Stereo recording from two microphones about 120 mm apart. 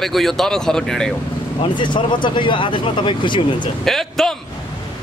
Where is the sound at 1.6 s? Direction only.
40° left (ahead or behind).